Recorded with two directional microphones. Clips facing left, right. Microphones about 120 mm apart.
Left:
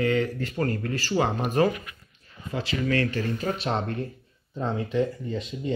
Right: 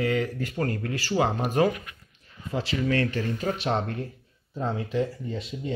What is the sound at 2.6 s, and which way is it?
Speech, 25° right (ahead or behind).